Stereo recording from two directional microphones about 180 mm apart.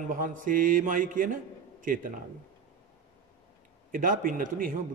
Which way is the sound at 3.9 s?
50° right (ahead or behind).